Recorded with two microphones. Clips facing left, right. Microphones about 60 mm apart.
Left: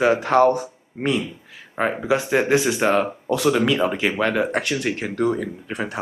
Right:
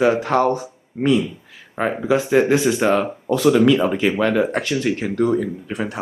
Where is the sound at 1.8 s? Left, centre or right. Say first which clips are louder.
Right 2 dB; centre.